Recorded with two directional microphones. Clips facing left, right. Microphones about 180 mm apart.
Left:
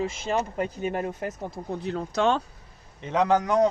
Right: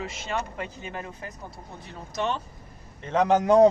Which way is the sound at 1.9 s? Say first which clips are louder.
Left 5 dB; 90° left.